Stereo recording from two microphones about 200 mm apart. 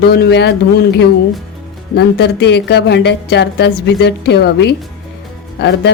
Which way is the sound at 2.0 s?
55° left (ahead or behind).